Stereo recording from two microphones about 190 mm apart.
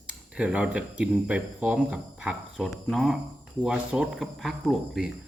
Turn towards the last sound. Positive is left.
turn(degrees=0)  # may be behind; listen again after turning